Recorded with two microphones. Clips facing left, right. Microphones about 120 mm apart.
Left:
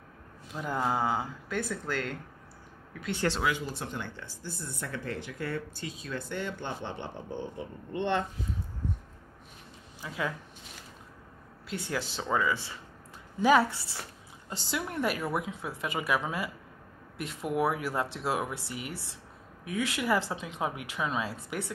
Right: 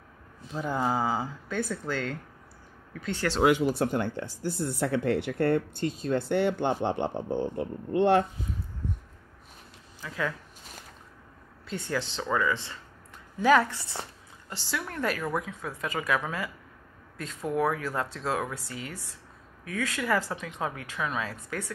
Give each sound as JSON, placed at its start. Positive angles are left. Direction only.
{"t": 0.5, "sound": "speech", "side_deg": 0}
{"t": 3.4, "sound": "speech", "side_deg": -60}
{"t": 4.7, "sound": "speech", "side_deg": -75}
{"t": 10.0, "sound": "speech", "side_deg": 15}
{"t": 11.7, "sound": "speech", "side_deg": 5}